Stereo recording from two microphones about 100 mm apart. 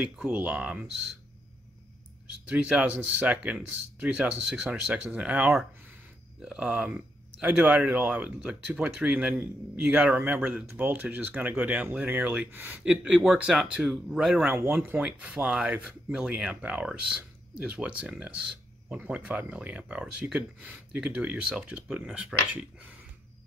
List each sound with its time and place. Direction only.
0.0 s speech: 15° right (ahead or behind)
2.5 s speech: 15° right (ahead or behind)
14.4 s speech: 20° right (ahead or behind)